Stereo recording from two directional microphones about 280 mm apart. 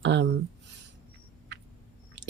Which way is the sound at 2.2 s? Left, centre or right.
Right.